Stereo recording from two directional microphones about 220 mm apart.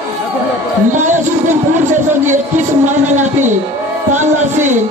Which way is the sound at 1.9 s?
35° right (ahead or behind).